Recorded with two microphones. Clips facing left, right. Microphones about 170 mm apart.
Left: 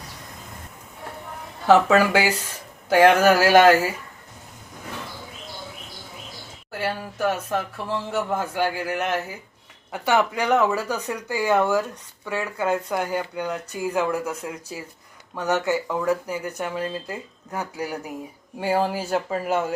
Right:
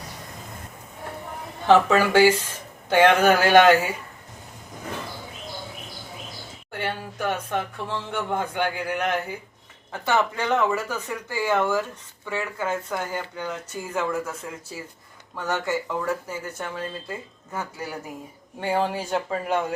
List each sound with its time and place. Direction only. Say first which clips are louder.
1.6 s speech: left 1 dB; 10° left (ahead or behind)
6.7 s speech: left 2 dB; 5° left (ahead or behind)
15.4 s speech: left 4 dB; 15° left (ahead or behind)